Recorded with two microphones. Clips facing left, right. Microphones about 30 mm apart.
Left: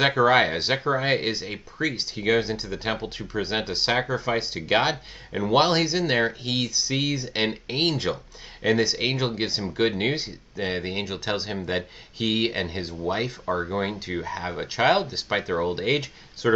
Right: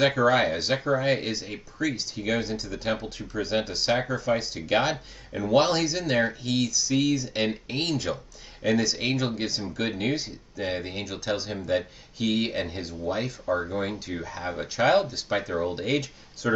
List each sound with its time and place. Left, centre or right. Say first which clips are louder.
0.0 s speech: left 2 dB; left